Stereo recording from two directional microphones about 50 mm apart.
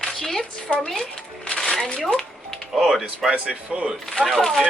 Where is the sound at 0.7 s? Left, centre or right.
Left.